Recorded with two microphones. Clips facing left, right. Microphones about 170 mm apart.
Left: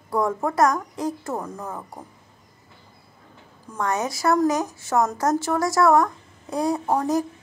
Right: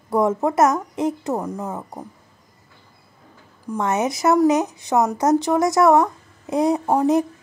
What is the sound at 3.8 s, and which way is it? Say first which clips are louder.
Speech: right 3 dB; 20° right (ahead or behind).